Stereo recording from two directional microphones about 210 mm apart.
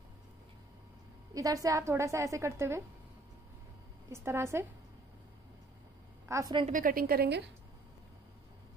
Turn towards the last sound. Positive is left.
turn(degrees=-50)  # may be behind; listen again after turning